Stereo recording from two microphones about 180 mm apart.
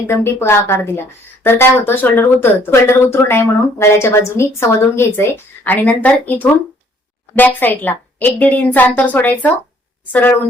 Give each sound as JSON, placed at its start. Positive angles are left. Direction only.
{"t": 0.1, "sound": "speech", "side_deg": 15}